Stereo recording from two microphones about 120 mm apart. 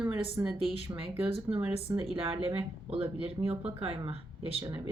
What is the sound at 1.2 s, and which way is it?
Speech, 50° right (ahead or behind).